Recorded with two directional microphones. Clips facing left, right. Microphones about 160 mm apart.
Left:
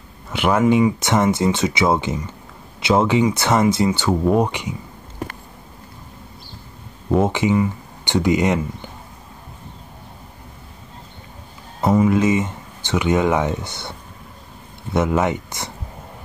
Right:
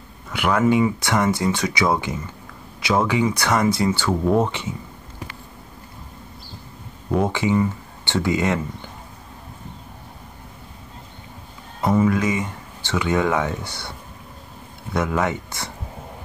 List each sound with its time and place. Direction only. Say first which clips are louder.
0.3 s speech: left 2 dB; 25° left (ahead or behind)
7.2 s speech: left 2 dB; 20° left (ahead or behind)
11.8 s speech: left 3 dB; 20° left (ahead or behind)
15.0 s speech: left 3 dB; 20° left (ahead or behind)